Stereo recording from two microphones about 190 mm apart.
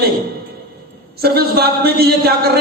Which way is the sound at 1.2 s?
55° right (ahead or behind).